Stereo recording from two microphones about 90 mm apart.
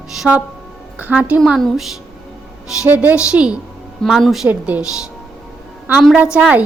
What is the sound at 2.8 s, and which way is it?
Speech, 15° right (ahead or behind).